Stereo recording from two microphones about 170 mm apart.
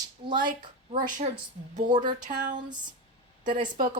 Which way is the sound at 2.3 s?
45° right (ahead or behind).